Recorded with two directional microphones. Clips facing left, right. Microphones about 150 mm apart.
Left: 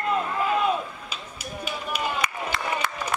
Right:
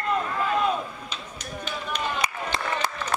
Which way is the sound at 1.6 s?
10° left (ahead or behind).